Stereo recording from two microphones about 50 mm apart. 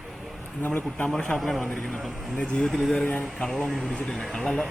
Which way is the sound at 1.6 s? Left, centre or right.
Centre.